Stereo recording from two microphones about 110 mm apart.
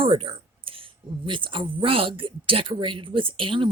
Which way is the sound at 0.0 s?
55° right (ahead or behind).